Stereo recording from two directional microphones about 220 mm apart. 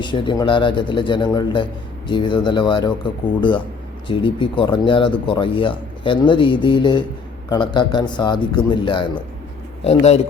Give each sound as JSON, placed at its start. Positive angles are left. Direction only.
{"t": 0.0, "sound": "speech", "side_deg": 20}